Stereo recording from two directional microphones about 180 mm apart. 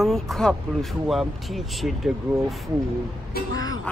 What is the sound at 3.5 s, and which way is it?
Speech, 20° left (ahead or behind).